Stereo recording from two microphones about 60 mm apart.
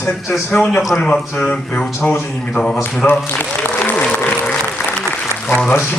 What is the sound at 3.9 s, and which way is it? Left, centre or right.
Applause, left.